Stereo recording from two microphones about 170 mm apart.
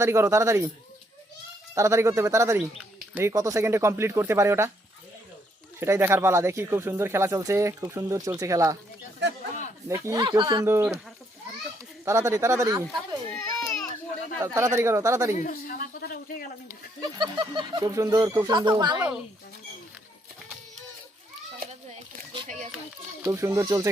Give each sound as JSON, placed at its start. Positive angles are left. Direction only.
{"t": 0.0, "sound": "speech", "side_deg": -15}
{"t": 1.7, "sound": "speech", "side_deg": -15}
{"t": 5.8, "sound": "speech", "side_deg": -15}
{"t": 9.9, "sound": "speech", "side_deg": -20}
{"t": 12.0, "sound": "speech", "side_deg": -15}
{"t": 13.3, "sound": "baby cry", "side_deg": 5}
{"t": 14.4, "sound": "speech", "side_deg": -15}
{"t": 15.4, "sound": "a woman's voice", "side_deg": 55}
{"t": 17.2, "sound": "speech", "side_deg": -30}
{"t": 18.9, "sound": "speech", "side_deg": -5}
{"t": 21.6, "sound": "a sound", "side_deg": -40}
{"t": 23.2, "sound": "speech", "side_deg": -15}